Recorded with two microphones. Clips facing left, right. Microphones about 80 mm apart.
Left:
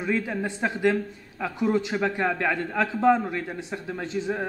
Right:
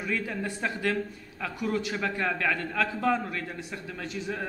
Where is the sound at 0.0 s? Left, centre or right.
Left.